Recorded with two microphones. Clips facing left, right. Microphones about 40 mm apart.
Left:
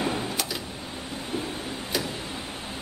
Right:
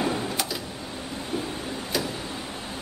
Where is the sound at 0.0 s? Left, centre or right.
Centre.